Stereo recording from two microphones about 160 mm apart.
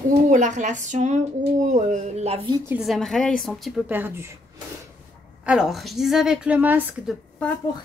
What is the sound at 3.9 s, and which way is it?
Speech, 10° right (ahead or behind).